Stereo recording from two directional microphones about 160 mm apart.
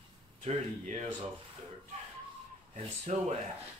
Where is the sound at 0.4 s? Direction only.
40° right (ahead or behind).